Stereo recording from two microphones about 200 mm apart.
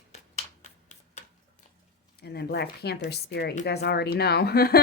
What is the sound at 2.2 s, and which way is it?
Speech, 55° left (ahead or behind).